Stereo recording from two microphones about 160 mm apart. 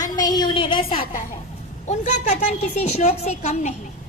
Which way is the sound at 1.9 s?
50° left (ahead or behind).